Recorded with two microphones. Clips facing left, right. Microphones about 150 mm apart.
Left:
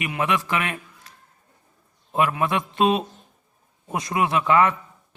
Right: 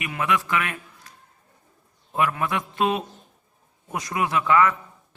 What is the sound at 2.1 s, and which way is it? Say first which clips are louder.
A man's voice: left 2 dB; 20° left (ahead or behind).